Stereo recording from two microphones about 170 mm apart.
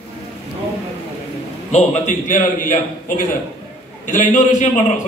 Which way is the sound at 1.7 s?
40° left (ahead or behind).